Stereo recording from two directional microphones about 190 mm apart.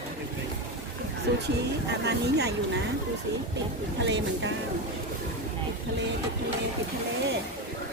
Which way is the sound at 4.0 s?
70° right (ahead or behind).